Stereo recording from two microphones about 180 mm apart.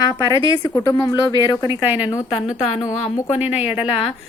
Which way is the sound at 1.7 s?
10° right (ahead or behind).